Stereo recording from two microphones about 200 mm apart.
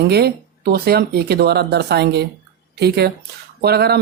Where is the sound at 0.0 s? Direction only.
50° right (ahead or behind).